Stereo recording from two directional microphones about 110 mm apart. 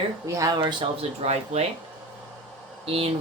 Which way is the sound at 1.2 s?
80° right.